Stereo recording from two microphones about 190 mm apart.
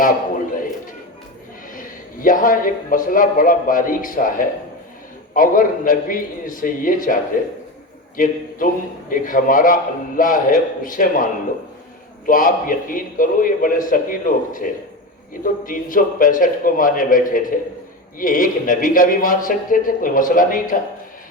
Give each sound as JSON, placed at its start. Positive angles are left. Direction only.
{"t": 1.7, "sound": "a man's voice", "side_deg": 45}